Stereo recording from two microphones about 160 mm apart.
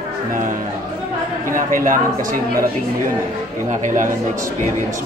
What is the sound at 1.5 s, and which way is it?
Speech, 55° right (ahead or behind).